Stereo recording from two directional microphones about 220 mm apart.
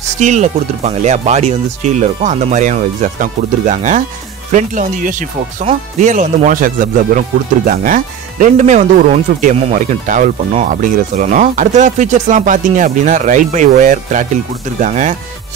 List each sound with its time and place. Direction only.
0.2 s speech: 30° right (ahead or behind)